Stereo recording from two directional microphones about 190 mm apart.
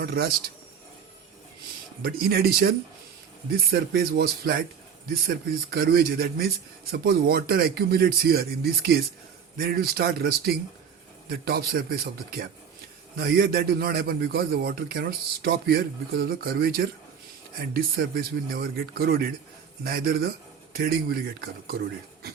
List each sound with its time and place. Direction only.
0.0 s a man's voice: 55° right (ahead or behind)
2.0 s a man's voice: 50° right (ahead or behind)
5.7 s a man's voice: 55° right (ahead or behind)